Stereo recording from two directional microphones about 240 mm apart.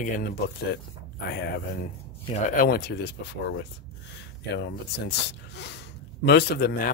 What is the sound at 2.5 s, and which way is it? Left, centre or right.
Speech, left.